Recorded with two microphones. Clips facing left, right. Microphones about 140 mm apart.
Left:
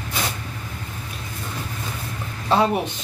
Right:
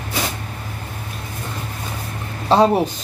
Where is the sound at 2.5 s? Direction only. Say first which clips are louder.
Right 5 dB; 30° right (ahead or behind).